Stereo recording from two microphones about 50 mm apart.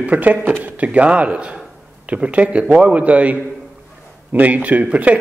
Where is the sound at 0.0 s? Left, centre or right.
Right.